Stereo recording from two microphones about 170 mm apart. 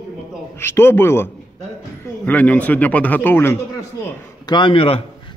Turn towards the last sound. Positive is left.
turn(degrees=35)  # may be behind; listen again after turning